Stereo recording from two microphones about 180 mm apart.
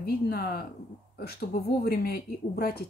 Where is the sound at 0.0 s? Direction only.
55° left (ahead or behind).